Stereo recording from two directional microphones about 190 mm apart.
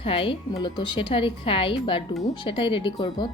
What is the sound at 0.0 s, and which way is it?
Speech, 30° left (ahead or behind).